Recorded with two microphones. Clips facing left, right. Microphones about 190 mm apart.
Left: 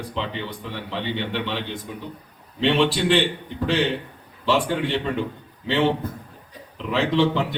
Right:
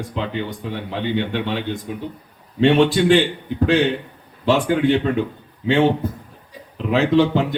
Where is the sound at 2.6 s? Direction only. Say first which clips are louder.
Right 5 dB; 50° right (ahead or behind).